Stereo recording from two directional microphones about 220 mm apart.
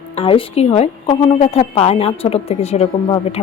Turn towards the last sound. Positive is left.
turn(degrees=25)  # may be behind; listen again after turning